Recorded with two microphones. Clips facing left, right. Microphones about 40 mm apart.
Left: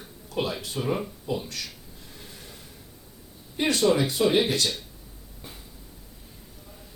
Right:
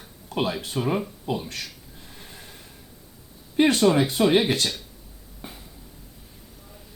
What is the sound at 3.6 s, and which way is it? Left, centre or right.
Speech, right.